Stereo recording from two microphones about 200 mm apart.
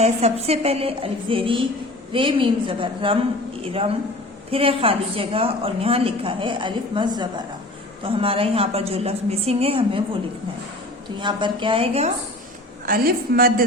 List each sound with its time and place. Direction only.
0.0 s a woman's voice: 30° right (ahead or behind)
11.2 s a woman's voice: 25° right (ahead or behind)
12.8 s a woman's voice: 45° right (ahead or behind)